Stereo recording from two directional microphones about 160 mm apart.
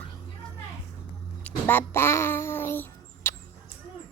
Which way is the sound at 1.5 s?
10° left (ahead or behind).